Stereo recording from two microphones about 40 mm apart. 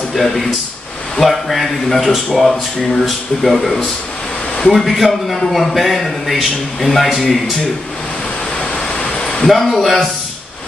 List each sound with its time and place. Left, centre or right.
0.1 s a man's voice: centre
4.7 s a man's voice: centre
8.5 s vehicle: left
9.5 s a man's voice: centre